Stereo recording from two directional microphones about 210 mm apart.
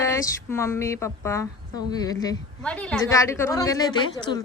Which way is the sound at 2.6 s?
5° left (ahead or behind).